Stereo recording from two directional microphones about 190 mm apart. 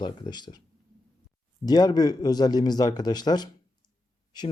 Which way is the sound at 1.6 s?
20° left (ahead or behind).